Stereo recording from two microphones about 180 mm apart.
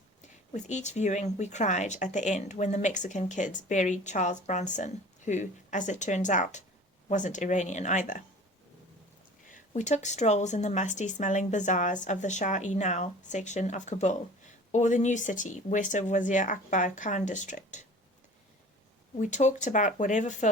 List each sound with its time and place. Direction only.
0.2 s speech: 40° left (ahead or behind)
9.5 s speech: 40° left (ahead or behind)
19.1 s speech: 40° left (ahead or behind)